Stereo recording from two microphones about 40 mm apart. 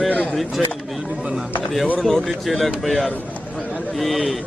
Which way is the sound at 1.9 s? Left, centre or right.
Centre.